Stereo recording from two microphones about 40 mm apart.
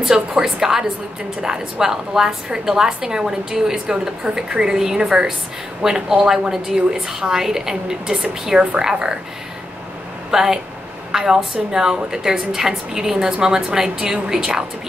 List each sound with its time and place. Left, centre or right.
0.4 s a woman's voice: centre
10.3 s a woman's voice: centre